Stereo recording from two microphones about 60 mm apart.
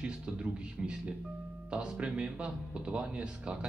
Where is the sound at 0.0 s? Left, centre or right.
Centre.